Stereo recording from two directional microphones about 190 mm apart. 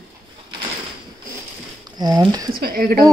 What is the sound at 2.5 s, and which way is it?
Speech, 50° right (ahead or behind).